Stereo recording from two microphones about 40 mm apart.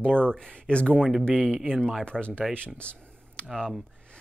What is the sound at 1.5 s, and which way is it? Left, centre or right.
Speech, centre.